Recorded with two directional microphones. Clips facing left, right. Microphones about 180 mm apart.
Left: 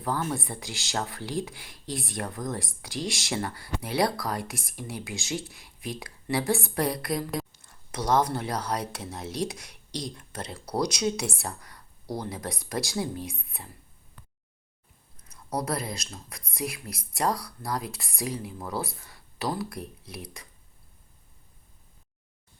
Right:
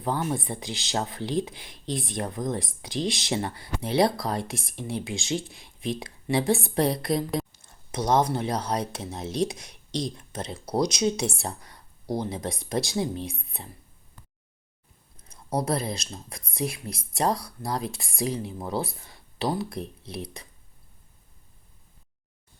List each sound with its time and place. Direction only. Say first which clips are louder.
0.0 s speech: right 2 dB; 20° right (ahead or behind)
15.3 s speech: right 3 dB; 25° right (ahead or behind)